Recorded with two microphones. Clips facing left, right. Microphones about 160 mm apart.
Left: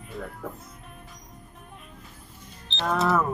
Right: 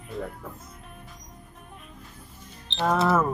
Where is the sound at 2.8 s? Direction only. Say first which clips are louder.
Right 2 dB; centre (ahead or behind).